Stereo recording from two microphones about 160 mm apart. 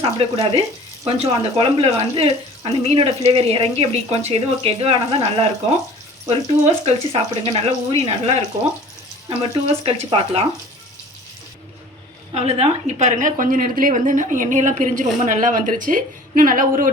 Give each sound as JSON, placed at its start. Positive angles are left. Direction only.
{"t": 0.0, "sound": "speech", "side_deg": -35}
{"t": 9.4, "sound": "speech", "side_deg": -35}
{"t": 12.3, "sound": "a woman's voice", "side_deg": -40}